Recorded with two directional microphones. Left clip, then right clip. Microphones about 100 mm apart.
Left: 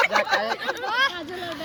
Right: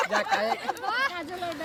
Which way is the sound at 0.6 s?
20° left (ahead or behind).